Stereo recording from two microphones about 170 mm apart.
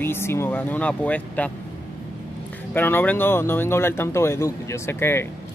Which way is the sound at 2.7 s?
10° left (ahead or behind).